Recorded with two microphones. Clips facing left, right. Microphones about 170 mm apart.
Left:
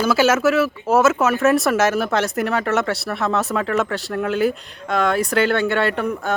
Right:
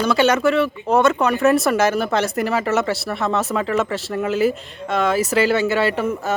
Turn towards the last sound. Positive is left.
turn(degrees=0)  # may be behind; listen again after turning